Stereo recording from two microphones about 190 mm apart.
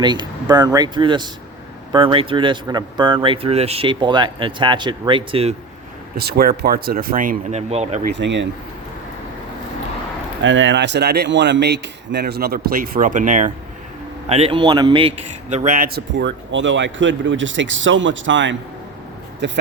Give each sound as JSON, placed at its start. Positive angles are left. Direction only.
{"t": 0.0, "sound": "speech", "side_deg": -25}
{"t": 6.1, "sound": "speech", "side_deg": -55}
{"t": 8.0, "sound": "speech", "side_deg": -65}
{"t": 10.4, "sound": "speech", "side_deg": -80}
{"t": 14.3, "sound": "speech", "side_deg": -30}
{"t": 15.4, "sound": "speech", "side_deg": -40}
{"t": 16.1, "sound": "speech", "side_deg": -70}